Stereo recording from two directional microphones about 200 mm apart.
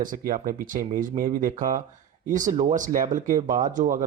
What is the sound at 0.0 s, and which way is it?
Speech, 45° right (ahead or behind).